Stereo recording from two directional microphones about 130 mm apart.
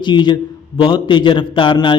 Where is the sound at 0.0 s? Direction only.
35° left (ahead or behind).